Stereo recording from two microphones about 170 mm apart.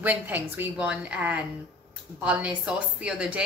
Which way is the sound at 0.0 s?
10° right (ahead or behind).